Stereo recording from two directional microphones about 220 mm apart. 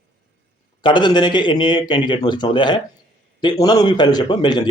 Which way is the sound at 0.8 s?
20° left (ahead or behind).